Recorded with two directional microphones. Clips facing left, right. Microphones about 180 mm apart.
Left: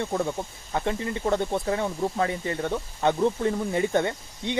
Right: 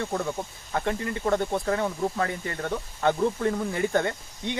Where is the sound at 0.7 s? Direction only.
20° left (ahead or behind).